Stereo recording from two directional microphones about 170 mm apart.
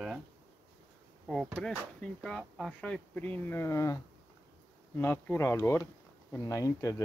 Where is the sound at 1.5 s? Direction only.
5° left (ahead or behind).